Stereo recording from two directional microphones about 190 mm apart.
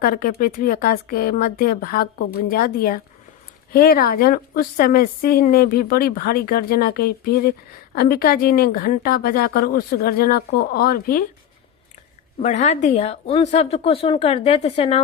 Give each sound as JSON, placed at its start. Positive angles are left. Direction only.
{"t": 0.0, "sound": "a woman's voice", "side_deg": 50}
{"t": 12.4, "sound": "speech", "side_deg": 40}